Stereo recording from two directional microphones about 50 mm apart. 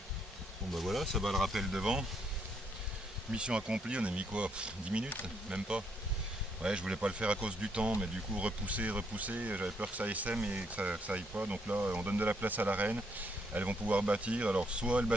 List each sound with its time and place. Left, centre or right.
0.7 s speech: centre
3.3 s speech: centre